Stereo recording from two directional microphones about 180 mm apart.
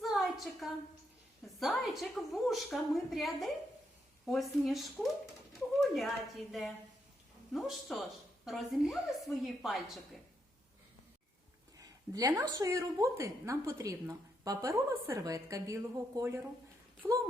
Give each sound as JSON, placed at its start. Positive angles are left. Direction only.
{"t": 0.0, "sound": "a sound", "side_deg": 0}
{"t": 1.5, "sound": "a woman's voice", "side_deg": 0}
{"t": 11.8, "sound": "a woman's voice", "side_deg": -20}